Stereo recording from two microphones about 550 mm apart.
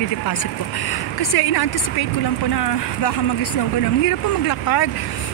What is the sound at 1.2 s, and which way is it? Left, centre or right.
Speech, left.